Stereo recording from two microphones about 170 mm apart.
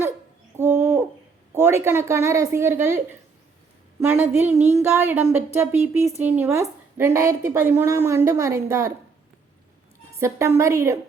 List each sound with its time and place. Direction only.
0.5 s bird: 15° right (ahead or behind)
1.5 s a woman's voice: 15° right (ahead or behind)
10.2 s a woman's voice: 15° right (ahead or behind)